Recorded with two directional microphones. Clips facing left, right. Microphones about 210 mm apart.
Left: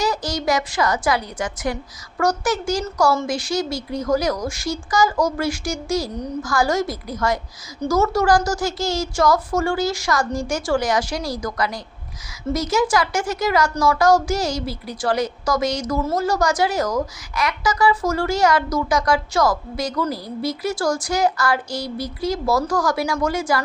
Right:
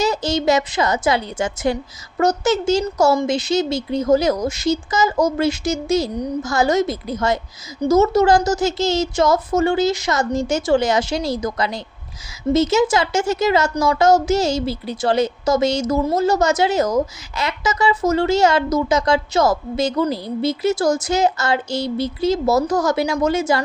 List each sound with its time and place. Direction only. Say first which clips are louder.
0.0 s speech: right 4 dB; 25° right (ahead or behind)